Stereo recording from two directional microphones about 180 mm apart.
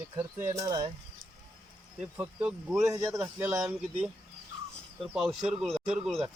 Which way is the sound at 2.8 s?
15° right (ahead or behind).